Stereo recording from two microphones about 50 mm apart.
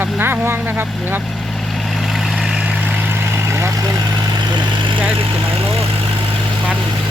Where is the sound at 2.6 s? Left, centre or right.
Right.